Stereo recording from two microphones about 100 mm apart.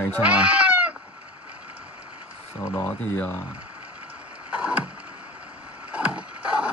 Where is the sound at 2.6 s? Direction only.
30° left (ahead or behind).